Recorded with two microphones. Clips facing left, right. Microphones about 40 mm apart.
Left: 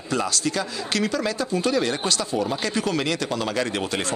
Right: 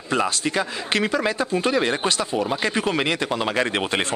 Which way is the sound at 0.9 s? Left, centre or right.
Right.